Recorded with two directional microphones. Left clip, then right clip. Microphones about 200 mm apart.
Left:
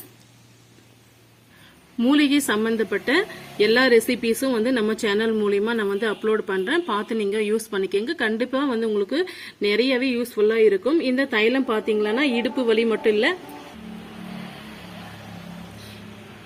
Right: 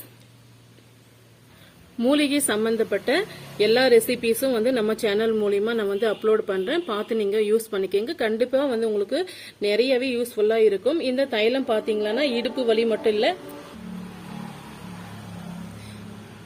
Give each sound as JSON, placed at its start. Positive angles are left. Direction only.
{"t": 2.0, "sound": "a woman's voice", "side_deg": 25}